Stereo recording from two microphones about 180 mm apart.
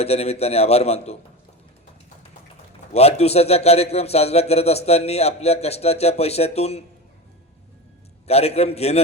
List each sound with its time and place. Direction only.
0.0 s a man's voice: 35° left (ahead or behind)
2.9 s a man's voice: 35° left (ahead or behind)
8.3 s a man's voice: 35° left (ahead or behind)